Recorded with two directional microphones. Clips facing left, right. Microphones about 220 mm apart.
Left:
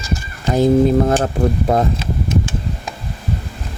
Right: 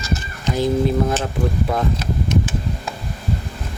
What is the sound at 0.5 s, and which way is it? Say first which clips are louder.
Speech: left 6 dB; 50° left (ahead or behind).